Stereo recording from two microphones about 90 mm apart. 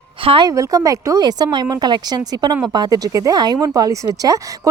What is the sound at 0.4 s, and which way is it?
Speech, 40° right (ahead or behind).